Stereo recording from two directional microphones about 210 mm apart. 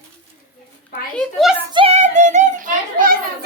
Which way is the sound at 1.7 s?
30° right (ahead or behind).